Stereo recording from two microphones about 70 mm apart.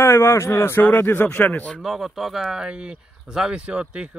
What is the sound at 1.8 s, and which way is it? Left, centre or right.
Speech, centre.